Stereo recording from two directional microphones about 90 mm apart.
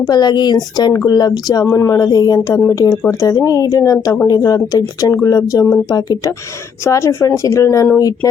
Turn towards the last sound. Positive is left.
turn(degrees=35)  # may be behind; listen again after turning